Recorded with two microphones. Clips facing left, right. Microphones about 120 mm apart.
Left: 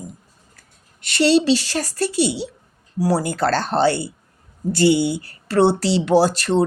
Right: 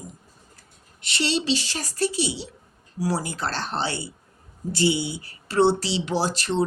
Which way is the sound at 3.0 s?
60° left (ahead or behind).